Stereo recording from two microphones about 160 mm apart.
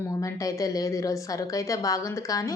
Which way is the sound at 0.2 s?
20° left (ahead or behind).